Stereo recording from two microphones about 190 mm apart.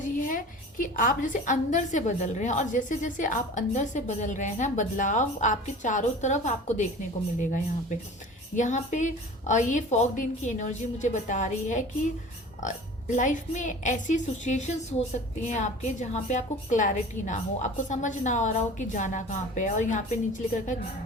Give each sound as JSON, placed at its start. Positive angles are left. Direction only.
{"t": 0.0, "sound": "a woman's voice", "side_deg": 45}